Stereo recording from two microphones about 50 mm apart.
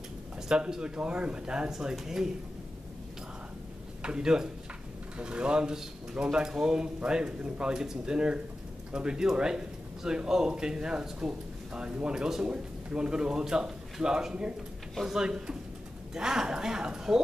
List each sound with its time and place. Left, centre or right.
0.5 s a man's voice: centre
4.0 s a man's voice: centre